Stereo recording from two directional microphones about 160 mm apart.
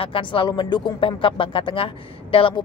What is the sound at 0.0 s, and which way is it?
Speech, 30° left (ahead or behind).